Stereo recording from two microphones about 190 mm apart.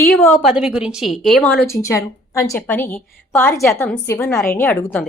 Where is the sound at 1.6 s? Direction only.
15° left (ahead or behind).